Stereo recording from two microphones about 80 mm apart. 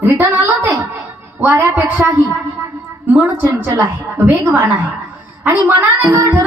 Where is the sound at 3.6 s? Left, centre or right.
Right.